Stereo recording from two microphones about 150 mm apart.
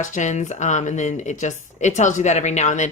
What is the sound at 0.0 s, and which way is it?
Speech, 55° left (ahead or behind).